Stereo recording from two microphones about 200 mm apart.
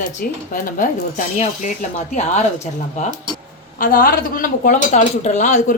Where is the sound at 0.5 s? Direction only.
45° left (ahead or behind).